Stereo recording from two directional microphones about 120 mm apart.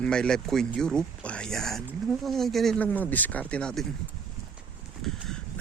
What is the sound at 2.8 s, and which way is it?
Speech, 15° left (ahead or behind).